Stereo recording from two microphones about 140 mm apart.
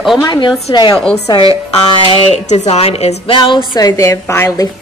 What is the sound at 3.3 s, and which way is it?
A woman's voice, 35° left (ahead or behind).